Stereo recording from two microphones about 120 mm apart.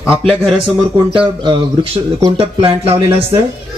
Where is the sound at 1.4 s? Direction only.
40° right (ahead or behind).